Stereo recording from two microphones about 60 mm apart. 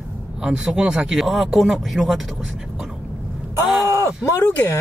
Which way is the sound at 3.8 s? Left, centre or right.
Left.